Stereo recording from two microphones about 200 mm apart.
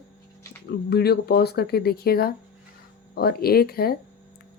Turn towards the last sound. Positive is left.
turn(degrees=50)  # may be behind; listen again after turning